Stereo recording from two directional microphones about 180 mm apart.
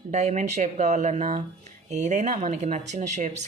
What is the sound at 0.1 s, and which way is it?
Speech, 40° right (ahead or behind).